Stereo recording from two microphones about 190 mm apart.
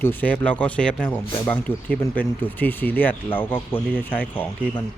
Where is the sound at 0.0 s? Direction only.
10° left (ahead or behind).